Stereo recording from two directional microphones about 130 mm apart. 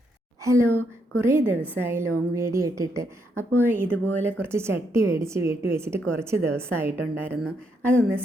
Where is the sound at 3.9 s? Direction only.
15° left (ahead or behind).